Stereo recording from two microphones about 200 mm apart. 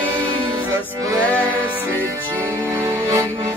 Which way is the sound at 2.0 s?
10° right (ahead or behind).